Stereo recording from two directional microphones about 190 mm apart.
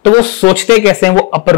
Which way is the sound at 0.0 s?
35° left (ahead or behind).